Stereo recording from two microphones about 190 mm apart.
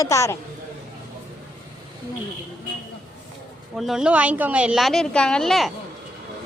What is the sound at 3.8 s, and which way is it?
A woman's voice, 5° right (ahead or behind).